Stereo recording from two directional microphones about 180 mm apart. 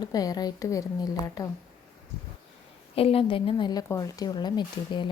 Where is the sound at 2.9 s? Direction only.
30° left (ahead or behind).